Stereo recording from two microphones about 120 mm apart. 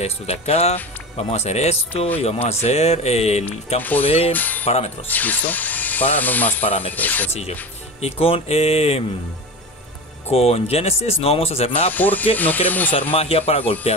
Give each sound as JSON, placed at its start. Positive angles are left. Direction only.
{"t": 0.0, "sound": "speech", "side_deg": 60}
{"t": 4.3, "sound": "speech", "side_deg": 15}
{"t": 4.6, "sound": "speech", "side_deg": 60}
{"t": 5.0, "sound": "speech", "side_deg": 15}
{"t": 8.0, "sound": "speech", "side_deg": 55}
{"t": 10.3, "sound": "speech", "side_deg": 55}
{"t": 11.9, "sound": "speech", "side_deg": 15}
{"t": 13.1, "sound": "speech", "side_deg": 55}